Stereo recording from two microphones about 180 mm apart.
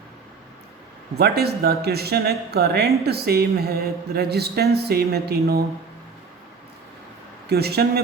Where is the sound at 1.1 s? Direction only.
65° right (ahead or behind).